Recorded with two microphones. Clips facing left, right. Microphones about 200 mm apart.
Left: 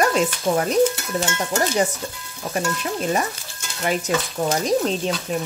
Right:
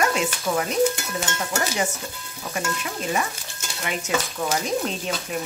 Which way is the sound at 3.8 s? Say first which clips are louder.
Left 4 dB; 35° left (ahead or behind).